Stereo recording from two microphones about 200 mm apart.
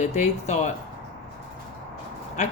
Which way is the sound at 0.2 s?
35° left (ahead or behind).